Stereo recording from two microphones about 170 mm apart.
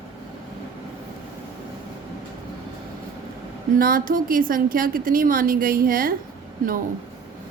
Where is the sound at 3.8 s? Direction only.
55° right (ahead or behind).